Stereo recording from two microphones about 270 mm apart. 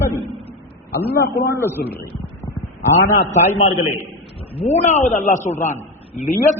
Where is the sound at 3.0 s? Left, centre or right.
Left.